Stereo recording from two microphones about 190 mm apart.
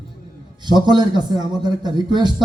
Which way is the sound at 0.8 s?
25° right (ahead or behind).